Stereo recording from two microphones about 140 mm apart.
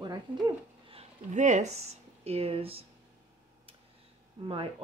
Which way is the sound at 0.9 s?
50° right (ahead or behind).